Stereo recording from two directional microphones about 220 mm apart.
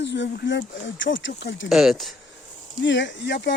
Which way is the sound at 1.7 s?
Centre (ahead or behind).